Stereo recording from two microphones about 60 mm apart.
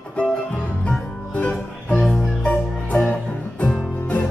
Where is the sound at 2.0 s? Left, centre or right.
Centre.